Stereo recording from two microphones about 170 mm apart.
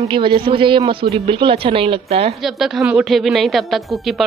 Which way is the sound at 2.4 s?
Centre (ahead or behind).